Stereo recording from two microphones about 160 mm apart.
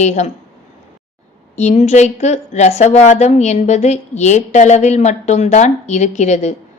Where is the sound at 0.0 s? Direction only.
45° left (ahead or behind).